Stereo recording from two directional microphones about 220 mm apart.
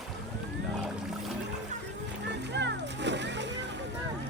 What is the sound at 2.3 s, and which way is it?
Music, 50° right (ahead or behind).